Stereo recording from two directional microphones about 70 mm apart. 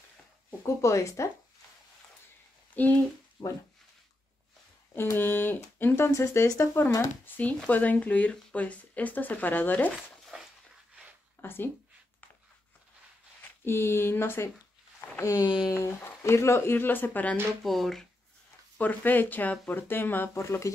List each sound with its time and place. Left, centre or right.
0.7 s speech: left
2.7 s speech: left
3.4 s speech: left
4.9 s speech: left
7.2 s speech: left
11.4 s speech: left
13.4 s speech: left
17.6 s speech: centre
18.8 s speech: left
20.4 s speech: left